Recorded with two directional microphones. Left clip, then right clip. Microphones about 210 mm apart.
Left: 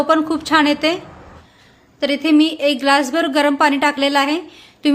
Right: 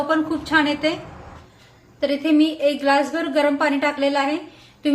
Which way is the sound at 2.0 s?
45° left (ahead or behind).